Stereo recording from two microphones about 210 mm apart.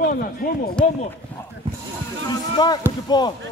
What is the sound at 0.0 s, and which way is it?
Speech, 40° left (ahead or behind).